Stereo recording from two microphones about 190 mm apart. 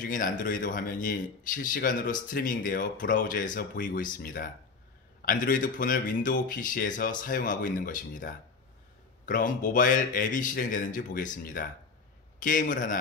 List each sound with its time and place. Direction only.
0.0 s speech: 45° left (ahead or behind)